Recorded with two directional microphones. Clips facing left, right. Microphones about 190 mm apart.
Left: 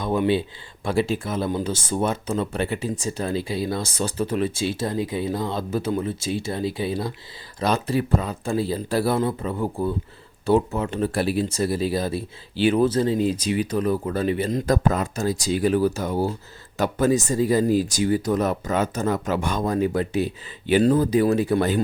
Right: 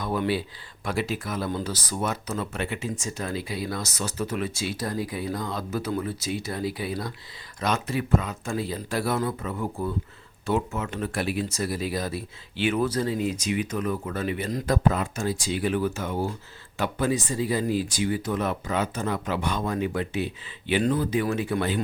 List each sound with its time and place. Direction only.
0.0 s speech: 25° left (ahead or behind); by 21.8 s 40° left (ahead or behind)